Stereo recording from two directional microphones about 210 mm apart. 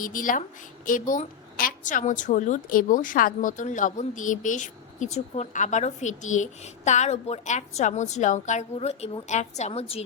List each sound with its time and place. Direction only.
0.0 s a woman's voice: 40° left (ahead or behind)